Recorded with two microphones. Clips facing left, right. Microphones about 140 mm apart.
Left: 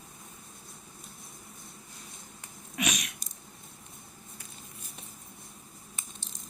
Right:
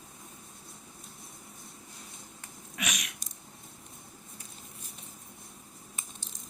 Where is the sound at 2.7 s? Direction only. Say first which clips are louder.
Left 5 dB; 25° left (ahead or behind).